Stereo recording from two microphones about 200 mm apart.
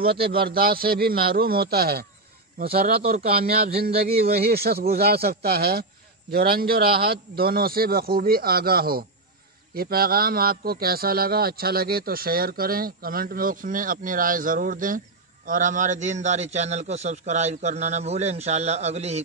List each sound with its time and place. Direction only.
0.0 s a man's voice: 50° right (ahead or behind); by 19.2 s 35° right (ahead or behind)